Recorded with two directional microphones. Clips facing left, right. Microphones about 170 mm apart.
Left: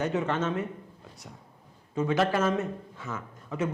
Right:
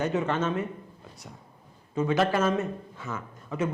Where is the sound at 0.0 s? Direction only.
15° right (ahead or behind).